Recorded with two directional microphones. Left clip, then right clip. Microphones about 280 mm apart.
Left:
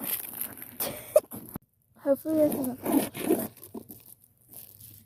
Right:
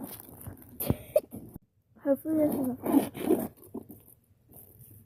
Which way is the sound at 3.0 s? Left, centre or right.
Left.